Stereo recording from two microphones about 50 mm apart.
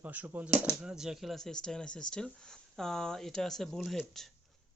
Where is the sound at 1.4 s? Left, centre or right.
Centre.